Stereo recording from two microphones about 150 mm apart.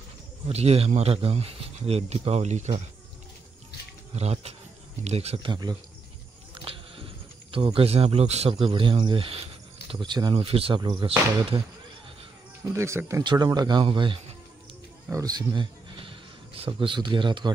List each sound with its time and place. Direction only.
0.5 s speech: 45° right (ahead or behind)
4.1 s speech: 45° right (ahead or behind)
5.5 s speech: 25° right (ahead or behind)
6.5 s a sound: 35° right (ahead or behind)
7.5 s speech: 35° right (ahead or behind)
12.7 s speech: 20° right (ahead or behind); by 14.2 s 35° right (ahead or behind)
15.0 s speech: 25° right (ahead or behind)